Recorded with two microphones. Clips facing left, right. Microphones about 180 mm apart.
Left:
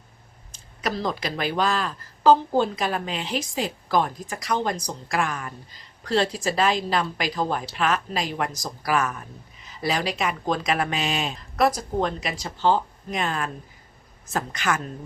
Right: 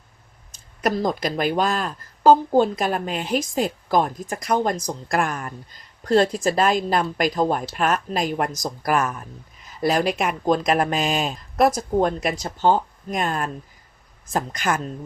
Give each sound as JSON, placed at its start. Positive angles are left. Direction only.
{"t": 0.8, "sound": "a woman's voice", "side_deg": -50}
{"t": 14.5, "sound": "a woman's voice", "side_deg": -45}